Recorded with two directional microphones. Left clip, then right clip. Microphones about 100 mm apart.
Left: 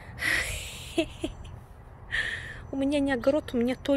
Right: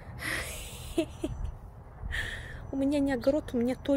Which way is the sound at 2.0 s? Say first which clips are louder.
Left 6 dB; 10° right (ahead or behind).